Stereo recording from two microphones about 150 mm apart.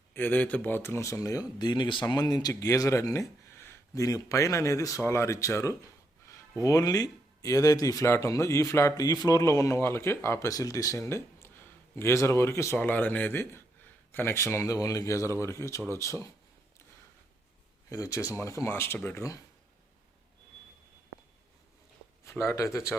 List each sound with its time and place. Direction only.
0.1 s speech: 10° left (ahead or behind)
17.8 s speech: 20° left (ahead or behind)
22.2 s speech: 20° left (ahead or behind)